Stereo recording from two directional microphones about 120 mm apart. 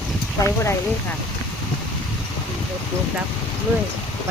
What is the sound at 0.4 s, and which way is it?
Speech, 25° left (ahead or behind).